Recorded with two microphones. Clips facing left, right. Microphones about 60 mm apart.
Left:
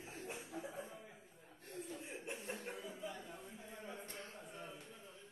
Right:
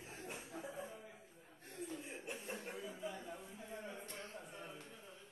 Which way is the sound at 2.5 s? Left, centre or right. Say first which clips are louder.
Even; centre.